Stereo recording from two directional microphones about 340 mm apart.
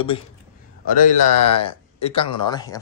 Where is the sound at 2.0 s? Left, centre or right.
Centre.